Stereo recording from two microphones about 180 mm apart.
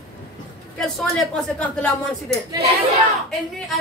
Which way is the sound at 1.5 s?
5° left (ahead or behind).